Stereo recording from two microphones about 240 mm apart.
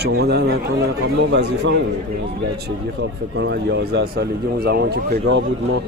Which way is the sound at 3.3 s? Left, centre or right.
Right.